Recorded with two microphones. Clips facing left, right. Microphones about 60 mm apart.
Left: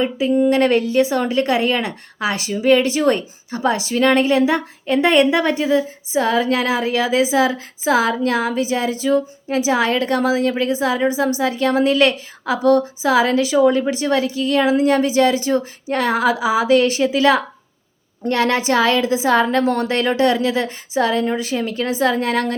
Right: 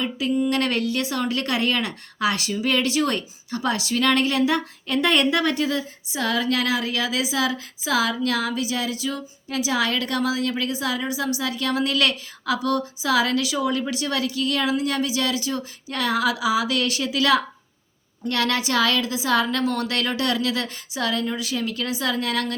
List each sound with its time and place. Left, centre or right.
0.0 s a woman's voice: left